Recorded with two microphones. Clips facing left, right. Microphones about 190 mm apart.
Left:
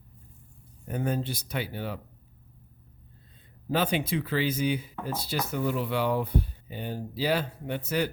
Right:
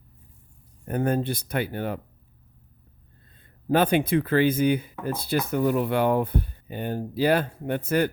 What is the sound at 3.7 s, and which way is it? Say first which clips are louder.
Speech: right 6 dB; 55° right (ahead or behind).